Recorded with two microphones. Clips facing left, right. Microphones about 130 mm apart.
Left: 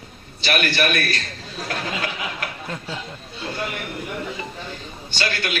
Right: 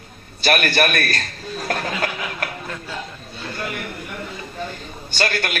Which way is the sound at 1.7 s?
45° right (ahead or behind).